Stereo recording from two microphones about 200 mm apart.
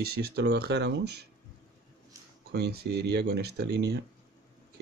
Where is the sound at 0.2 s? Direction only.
55° right (ahead or behind).